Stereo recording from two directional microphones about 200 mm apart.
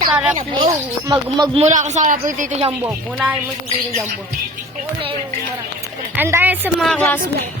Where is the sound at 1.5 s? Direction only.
35° right (ahead or behind).